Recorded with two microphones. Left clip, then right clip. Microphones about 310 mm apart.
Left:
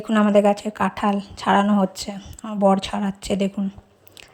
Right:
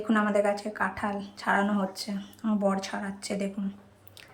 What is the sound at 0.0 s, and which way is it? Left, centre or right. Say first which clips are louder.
A woman's voice: left 8 dB; left.